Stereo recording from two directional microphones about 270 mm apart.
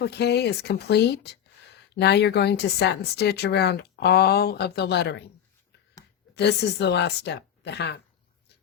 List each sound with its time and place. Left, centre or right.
0.0 s speech: left
6.3 s speech: left